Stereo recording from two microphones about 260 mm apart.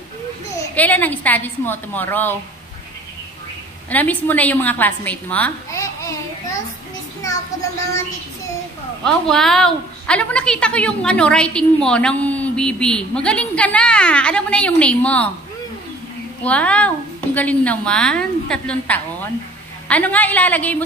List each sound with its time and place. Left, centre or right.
0.7 s a woman's voice: centre
3.9 s a woman's voice: centre
7.2 s a woman's voice: centre
9.0 s a woman's voice: centre
16.4 s a woman's voice: centre